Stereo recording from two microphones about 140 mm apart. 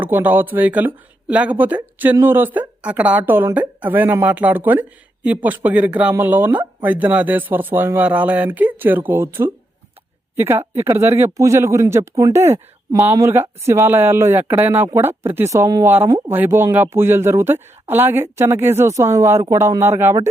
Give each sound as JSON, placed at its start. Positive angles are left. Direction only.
{"t": 0.0, "sound": "speech", "side_deg": -15}